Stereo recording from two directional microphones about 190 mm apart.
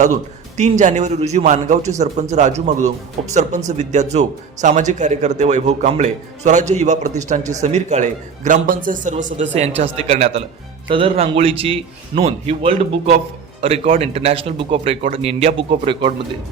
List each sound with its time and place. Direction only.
0.0 s a man's voice: 40° right (ahead or behind)